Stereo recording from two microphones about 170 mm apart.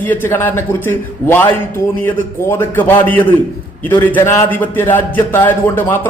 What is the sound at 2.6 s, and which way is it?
A man's voice, 15° left (ahead or behind).